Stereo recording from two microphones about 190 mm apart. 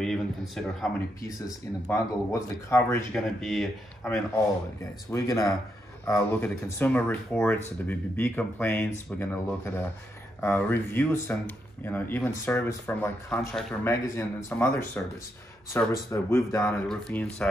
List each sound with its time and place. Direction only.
0.0 s a sound: centre (ahead or behind)
1.9 s speech: 15° left (ahead or behind)
3.3 s speech: centre (ahead or behind)
5.1 s speech: 15° left (ahead or behind)